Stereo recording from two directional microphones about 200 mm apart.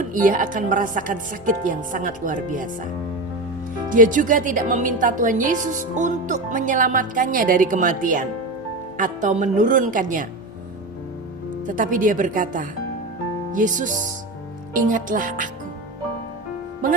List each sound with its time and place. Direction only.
0.0 s speech: 40° right (ahead or behind)
11.6 s speech: 40° right (ahead or behind)